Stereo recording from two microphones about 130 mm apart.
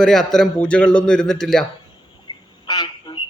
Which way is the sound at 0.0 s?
5° left (ahead or behind).